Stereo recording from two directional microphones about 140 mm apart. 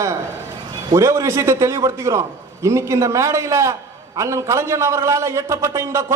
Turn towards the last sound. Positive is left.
turn(degrees=-20)  # may be behind; listen again after turning